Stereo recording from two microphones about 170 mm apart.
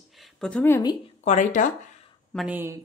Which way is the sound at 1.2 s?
45° left (ahead or behind).